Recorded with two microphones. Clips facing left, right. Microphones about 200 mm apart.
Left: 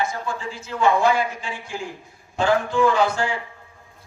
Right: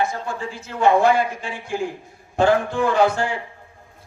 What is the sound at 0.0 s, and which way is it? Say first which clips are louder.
A man's voice: right 2 dB; 60° right (ahead or behind).